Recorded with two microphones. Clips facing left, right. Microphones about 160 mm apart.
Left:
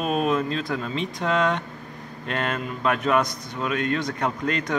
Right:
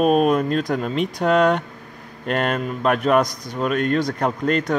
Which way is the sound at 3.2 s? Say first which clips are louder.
Right 5 dB; 40° right (ahead or behind).